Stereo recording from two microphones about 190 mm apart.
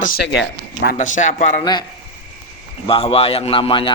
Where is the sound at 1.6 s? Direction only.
25° left (ahead or behind).